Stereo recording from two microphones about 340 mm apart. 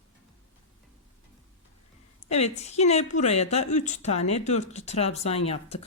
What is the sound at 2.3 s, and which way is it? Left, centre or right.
A woman's voice, centre.